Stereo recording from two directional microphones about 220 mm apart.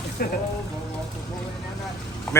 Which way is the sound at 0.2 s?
40° left (ahead or behind).